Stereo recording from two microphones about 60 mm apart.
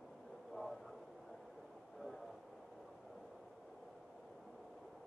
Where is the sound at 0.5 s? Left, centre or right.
Centre.